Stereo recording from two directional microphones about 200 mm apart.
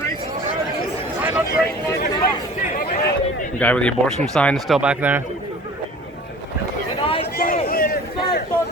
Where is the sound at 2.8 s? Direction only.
45° left (ahead or behind).